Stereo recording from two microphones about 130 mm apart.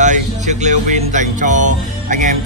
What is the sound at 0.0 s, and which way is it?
Music, 65° right (ahead or behind).